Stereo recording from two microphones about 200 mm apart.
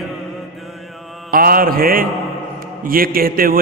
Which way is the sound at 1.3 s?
45° right (ahead or behind).